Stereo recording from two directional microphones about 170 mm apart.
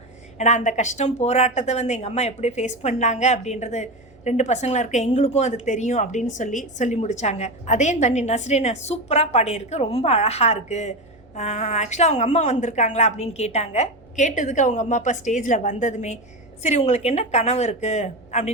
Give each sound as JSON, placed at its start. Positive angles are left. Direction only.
{"t": 0.3, "sound": "a woman's voice", "side_deg": 45}